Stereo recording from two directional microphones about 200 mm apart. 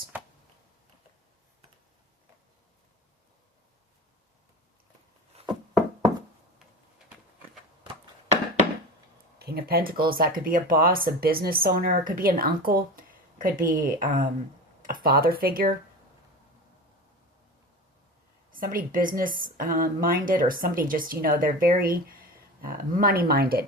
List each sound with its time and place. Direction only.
5.3 s a sound: 30° right (ahead or behind)
9.4 s a woman's voice: 50° right (ahead or behind)
18.5 s a woman's voice: 45° right (ahead or behind)